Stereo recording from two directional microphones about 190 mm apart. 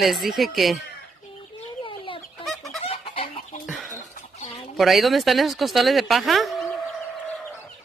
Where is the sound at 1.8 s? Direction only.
25° left (ahead or behind).